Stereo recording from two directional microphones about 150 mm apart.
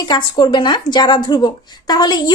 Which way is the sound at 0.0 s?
30° left (ahead or behind).